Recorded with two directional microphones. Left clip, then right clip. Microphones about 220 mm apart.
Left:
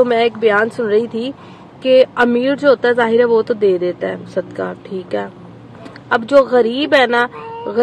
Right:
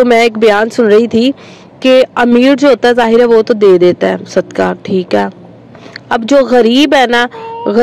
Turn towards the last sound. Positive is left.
turn(degrees=-35)  # may be behind; listen again after turning